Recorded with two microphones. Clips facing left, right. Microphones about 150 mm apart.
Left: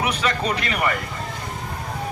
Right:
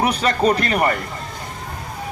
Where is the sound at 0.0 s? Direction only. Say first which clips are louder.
Right 6 dB; 40° right (ahead or behind).